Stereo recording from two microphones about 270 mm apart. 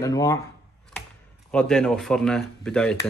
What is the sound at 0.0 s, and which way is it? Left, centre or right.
Speech, centre.